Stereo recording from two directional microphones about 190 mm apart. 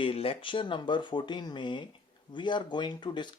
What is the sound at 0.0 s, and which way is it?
Speech, 30° left (ahead or behind).